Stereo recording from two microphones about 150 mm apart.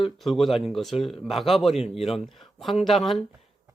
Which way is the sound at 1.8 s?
40° left (ahead or behind).